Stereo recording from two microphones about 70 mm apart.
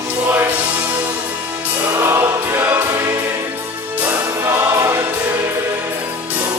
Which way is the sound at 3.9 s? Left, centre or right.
Right.